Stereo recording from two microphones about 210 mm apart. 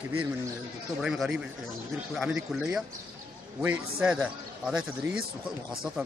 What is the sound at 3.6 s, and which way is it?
A man's voice, 5° right (ahead or behind).